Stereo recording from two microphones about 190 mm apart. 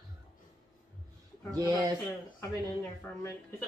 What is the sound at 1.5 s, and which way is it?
Speech, 20° right (ahead or behind).